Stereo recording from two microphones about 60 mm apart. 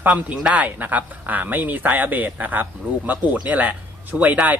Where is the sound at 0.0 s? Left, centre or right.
Right.